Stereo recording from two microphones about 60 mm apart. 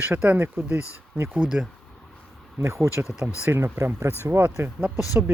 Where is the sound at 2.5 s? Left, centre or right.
Right.